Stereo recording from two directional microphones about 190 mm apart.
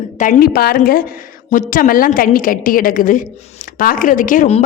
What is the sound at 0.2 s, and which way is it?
A woman's voice, 45° left (ahead or behind).